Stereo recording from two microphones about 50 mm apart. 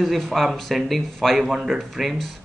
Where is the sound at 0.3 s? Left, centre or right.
Centre.